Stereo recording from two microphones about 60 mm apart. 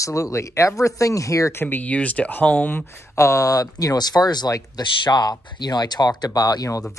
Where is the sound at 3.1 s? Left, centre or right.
Left.